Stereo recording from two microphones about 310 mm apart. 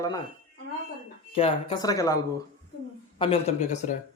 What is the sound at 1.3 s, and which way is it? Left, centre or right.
A man's voice, centre.